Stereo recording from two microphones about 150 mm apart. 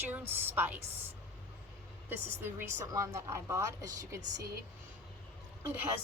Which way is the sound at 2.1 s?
15° right (ahead or behind).